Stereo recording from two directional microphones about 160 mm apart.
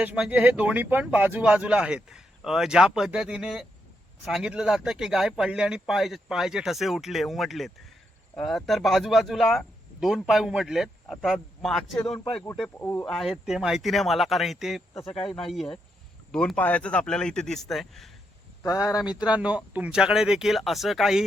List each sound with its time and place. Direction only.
0.0 s speech: 10° right (ahead or behind); by 13.1 s 15° left (ahead or behind)
13.1 s speech: centre (ahead or behind)
18.6 s speech: 20° left (ahead or behind)
19.2 s speech: 5° right (ahead or behind)